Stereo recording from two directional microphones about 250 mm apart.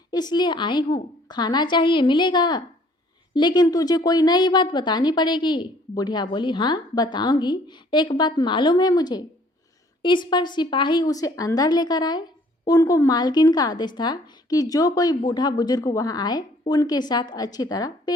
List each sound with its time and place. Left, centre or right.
0.1 s speech: centre